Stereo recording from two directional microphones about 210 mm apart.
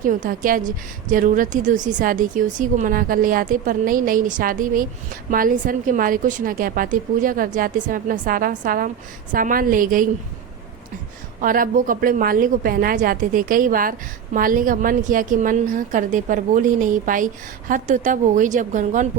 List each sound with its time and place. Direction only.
0.0 s a woman's voice: 40° right (ahead or behind)
11.3 s a woman's voice: 40° right (ahead or behind)